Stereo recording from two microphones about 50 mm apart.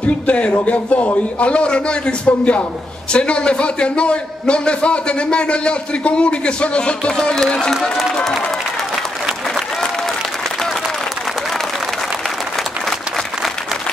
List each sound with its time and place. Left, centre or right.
0.0 s a man's voice: left; by 8.4 s centre